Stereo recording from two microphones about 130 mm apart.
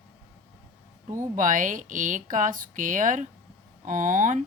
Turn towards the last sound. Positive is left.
turn(degrees=-80)